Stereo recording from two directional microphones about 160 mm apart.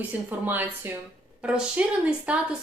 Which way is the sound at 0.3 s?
10° right (ahead or behind).